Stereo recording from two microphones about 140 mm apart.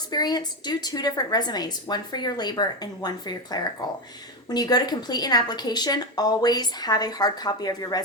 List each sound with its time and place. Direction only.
0.1 s a woman's voice: 30° left (ahead or behind)